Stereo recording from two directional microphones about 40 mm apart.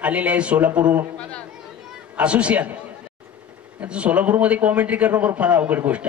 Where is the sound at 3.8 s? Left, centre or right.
Right.